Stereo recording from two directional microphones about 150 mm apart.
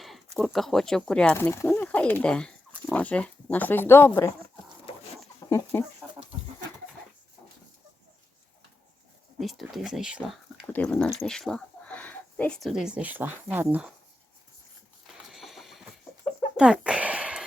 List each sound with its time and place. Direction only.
0.3 s speech: centre (ahead or behind); by 4.3 s 15° left (ahead or behind)
5.5 s chicken: 20° left (ahead or behind)
6.0 s dog: 10° right (ahead or behind)
9.4 s speech: centre (ahead or behind)
10.7 s speech: 10° left (ahead or behind); by 13.9 s 10° right (ahead or behind)
15.0 s a sound: centre (ahead or behind)